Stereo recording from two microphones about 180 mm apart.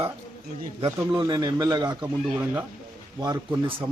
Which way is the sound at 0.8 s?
20° right (ahead or behind).